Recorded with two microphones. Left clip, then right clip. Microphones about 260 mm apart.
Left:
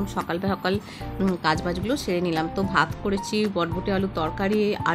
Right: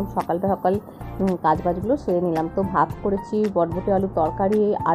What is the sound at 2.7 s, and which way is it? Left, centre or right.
Speech, left.